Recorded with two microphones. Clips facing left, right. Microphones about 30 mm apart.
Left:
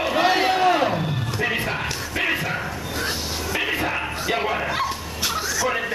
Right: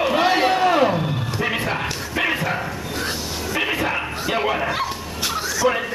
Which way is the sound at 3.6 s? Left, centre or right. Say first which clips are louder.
Right 3 dB; centre.